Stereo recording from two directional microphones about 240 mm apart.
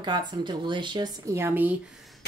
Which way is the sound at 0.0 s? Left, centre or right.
Centre.